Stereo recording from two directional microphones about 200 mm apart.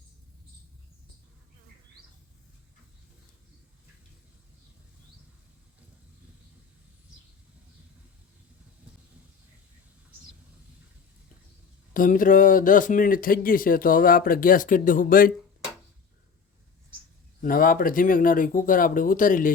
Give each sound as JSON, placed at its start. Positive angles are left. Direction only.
{"t": 11.9, "sound": "speech", "side_deg": 40}
{"t": 17.4, "sound": "speech", "side_deg": 45}